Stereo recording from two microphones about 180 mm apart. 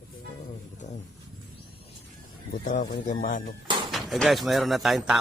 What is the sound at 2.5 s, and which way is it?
Speech, 50° left (ahead or behind).